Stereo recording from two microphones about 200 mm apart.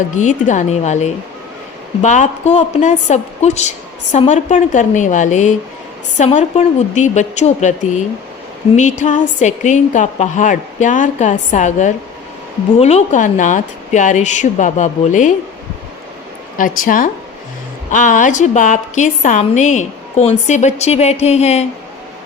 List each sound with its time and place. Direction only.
0.2 s a woman's voice: 40° left (ahead or behind)
8.7 s a woman's voice: 35° left (ahead or behind)
16.6 s a woman's voice: 40° left (ahead or behind)